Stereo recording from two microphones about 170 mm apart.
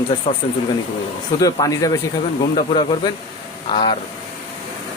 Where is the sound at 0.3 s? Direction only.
35° left (ahead or behind).